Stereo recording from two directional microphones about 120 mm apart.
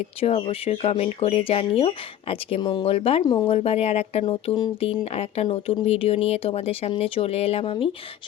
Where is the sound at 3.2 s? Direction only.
35° left (ahead or behind).